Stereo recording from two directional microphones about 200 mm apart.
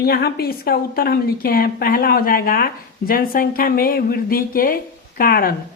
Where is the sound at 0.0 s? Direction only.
50° left (ahead or behind).